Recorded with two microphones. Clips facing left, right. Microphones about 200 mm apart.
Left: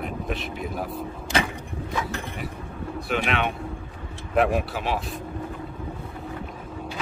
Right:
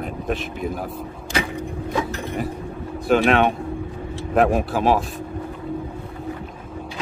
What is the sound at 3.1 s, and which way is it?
Speech, 45° right (ahead or behind).